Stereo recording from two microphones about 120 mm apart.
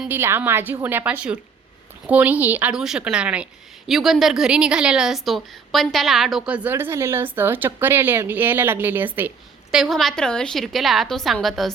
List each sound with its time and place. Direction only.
0.1 s a woman's voice: 20° right (ahead or behind)
9.7 s a woman's voice: centre (ahead or behind)